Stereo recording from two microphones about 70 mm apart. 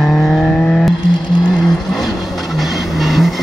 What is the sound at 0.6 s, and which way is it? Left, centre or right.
Vehicle, centre.